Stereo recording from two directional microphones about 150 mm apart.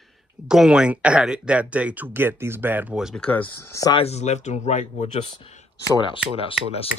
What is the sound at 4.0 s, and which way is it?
Speech, 45° left (ahead or behind).